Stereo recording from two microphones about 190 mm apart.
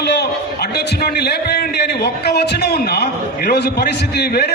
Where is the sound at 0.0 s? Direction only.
60° left (ahead or behind).